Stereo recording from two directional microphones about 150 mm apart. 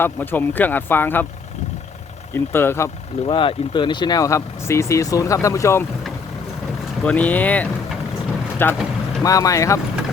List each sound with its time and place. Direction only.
0.0 s speech: 15° left (ahead or behind)
2.3 s speech: 15° left (ahead or behind)
3.2 s speech: 35° left (ahead or behind); by 5.8 s 20° left (ahead or behind)
7.0 s speech: 10° left (ahead or behind)